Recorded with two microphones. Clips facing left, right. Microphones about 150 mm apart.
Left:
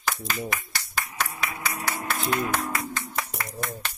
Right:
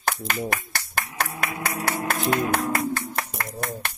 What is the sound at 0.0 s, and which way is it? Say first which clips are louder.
Clapping: right 3 dB; 60° right (ahead or behind).